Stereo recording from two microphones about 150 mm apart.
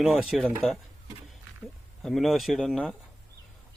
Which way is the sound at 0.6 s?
40° left (ahead or behind).